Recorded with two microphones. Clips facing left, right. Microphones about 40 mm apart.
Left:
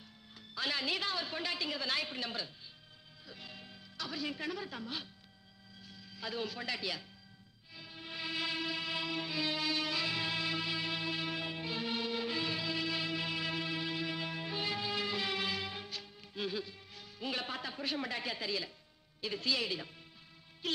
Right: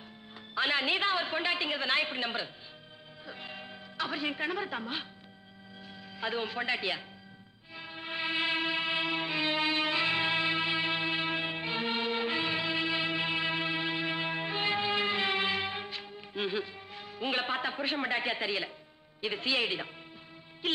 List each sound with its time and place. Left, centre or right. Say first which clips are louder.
0.6 s a woman's voice: right 7 dB; right
6.1 s a woman's voice: right 6 dB; right
7.7 s music: right 7 dB; right
19.2 s a woman's voice: right 5 dB; right
20.6 s music: right 5 dB; right